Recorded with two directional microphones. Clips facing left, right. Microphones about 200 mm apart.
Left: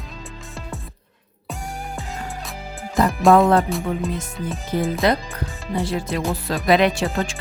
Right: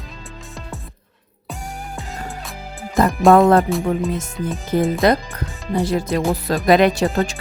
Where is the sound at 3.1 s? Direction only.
Centre (ahead or behind).